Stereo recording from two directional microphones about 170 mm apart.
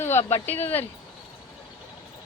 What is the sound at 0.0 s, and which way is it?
Speech, 15° left (ahead or behind).